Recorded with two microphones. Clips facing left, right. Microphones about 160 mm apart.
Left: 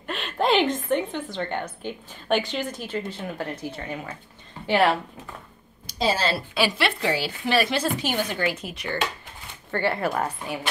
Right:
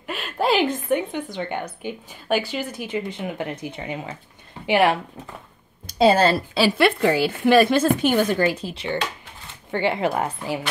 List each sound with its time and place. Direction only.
0.0 s a woman's voice: 5° right (ahead or behind)
5.9 s speech: 55° right (ahead or behind); by 8.9 s 30° right (ahead or behind)
9.7 s a woman's voice: 15° right (ahead or behind)